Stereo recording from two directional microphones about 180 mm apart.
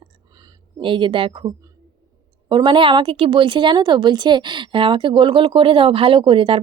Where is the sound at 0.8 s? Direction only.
25° right (ahead or behind).